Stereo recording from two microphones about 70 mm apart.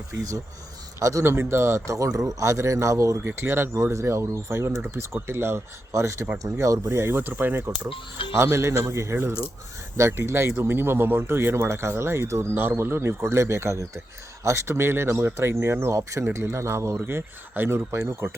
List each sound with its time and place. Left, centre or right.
0.9 s a man's voice: right
1.2 s speech: right
3.2 s speech: right
8.3 s speech: right
12.5 s speech: right